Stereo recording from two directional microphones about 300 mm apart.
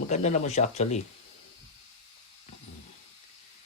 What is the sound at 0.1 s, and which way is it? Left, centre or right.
Speech, left.